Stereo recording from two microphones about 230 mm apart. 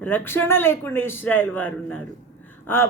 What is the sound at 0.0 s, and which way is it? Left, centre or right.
Speech, centre.